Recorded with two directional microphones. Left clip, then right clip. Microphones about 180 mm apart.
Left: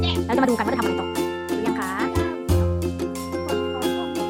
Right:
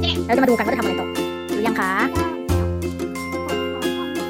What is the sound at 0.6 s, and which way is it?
Speech, centre (ahead or behind).